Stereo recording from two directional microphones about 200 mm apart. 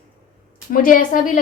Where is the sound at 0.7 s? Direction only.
45° left (ahead or behind).